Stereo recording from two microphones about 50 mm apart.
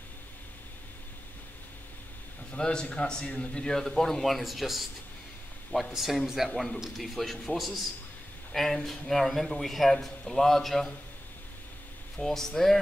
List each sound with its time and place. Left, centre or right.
2.5 s a man's voice: centre
8.8 s a man's voice: centre
12.2 s a man's voice: centre